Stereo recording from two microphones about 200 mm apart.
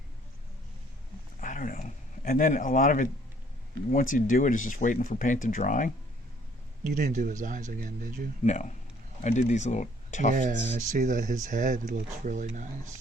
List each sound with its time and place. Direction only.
1.4 s a sound: 45° left (ahead or behind)
4.1 s speech: 40° left (ahead or behind)
6.8 s speech: 40° right (ahead or behind)
8.4 s speech: 35° left (ahead or behind)
10.3 s speech: 40° right (ahead or behind)